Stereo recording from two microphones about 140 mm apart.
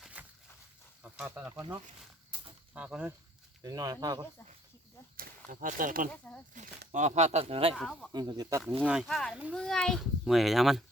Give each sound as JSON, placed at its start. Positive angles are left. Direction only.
{"t": 0.0, "sound": "a sound", "side_deg": -10}
{"t": 1.5, "sound": "speech", "side_deg": -20}
{"t": 3.6, "sound": "speech", "side_deg": -25}
{"t": 5.5, "sound": "speech", "side_deg": -70}
{"t": 6.5, "sound": "speech", "side_deg": -60}
{"t": 7.8, "sound": "a child's voice", "side_deg": 5}
{"t": 8.1, "sound": "speech", "side_deg": -30}
{"t": 8.9, "sound": "a child's voice", "side_deg": 0}